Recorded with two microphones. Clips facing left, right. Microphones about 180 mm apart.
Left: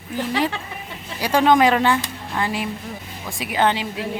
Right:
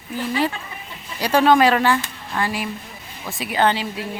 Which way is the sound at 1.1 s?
10° left (ahead or behind).